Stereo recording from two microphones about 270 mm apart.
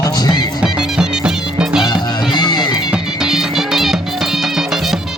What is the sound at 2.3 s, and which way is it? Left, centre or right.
Music, centre.